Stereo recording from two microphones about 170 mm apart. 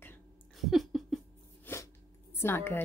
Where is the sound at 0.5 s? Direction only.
Centre (ahead or behind).